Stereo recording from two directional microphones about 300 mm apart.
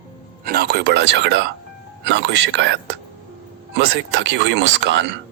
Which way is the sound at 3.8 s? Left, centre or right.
Right.